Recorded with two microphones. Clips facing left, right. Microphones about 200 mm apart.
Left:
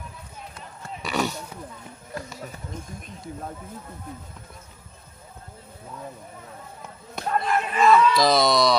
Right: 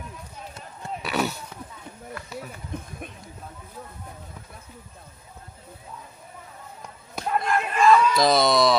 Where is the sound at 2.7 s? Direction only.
60° right (ahead or behind).